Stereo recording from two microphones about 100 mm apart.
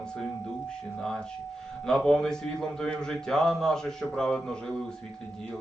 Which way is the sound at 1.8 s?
5° left (ahead or behind).